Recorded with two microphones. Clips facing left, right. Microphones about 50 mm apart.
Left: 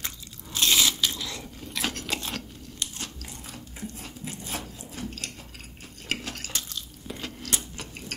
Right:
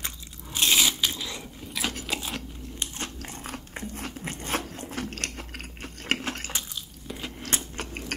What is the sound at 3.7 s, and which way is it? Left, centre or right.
Biting, right.